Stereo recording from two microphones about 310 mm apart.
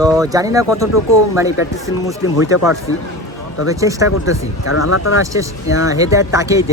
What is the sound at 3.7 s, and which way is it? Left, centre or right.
Speech, centre.